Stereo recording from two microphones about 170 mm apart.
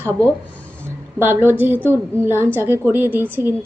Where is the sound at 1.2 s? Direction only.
10° right (ahead or behind).